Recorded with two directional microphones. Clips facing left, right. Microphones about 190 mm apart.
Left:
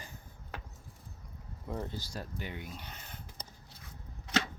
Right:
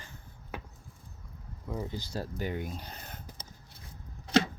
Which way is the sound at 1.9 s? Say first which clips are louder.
Right 5 dB; 20° right (ahead or behind).